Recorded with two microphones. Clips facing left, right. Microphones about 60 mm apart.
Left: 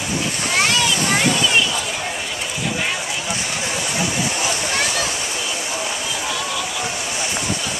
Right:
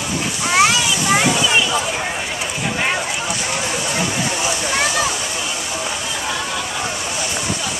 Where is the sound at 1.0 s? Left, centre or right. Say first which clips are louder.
Right 2 dB; right.